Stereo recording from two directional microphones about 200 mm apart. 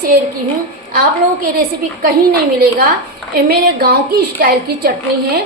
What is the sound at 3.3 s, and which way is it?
A woman's voice, 50° right (ahead or behind).